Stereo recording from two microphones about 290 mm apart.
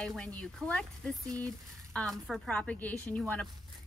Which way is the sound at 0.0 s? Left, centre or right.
Centre.